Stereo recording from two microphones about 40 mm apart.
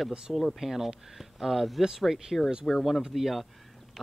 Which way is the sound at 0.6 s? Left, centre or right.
Centre.